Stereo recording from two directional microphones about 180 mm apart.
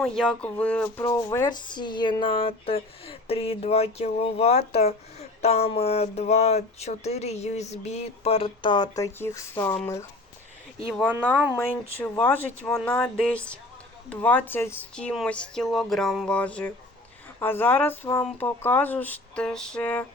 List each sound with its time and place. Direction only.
0.0 s speech: 5° left (ahead or behind)
1.0 s speech: 15° left (ahead or behind)
11.5 s speech: 10° left (ahead or behind)